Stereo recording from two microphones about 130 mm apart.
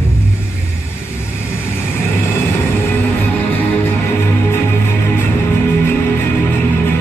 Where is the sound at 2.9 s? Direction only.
15° left (ahead or behind).